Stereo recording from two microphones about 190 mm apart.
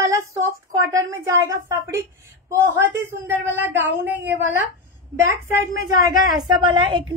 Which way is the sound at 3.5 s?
10° right (ahead or behind).